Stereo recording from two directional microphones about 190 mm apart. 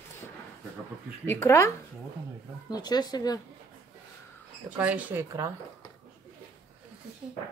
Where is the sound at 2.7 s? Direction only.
20° left (ahead or behind).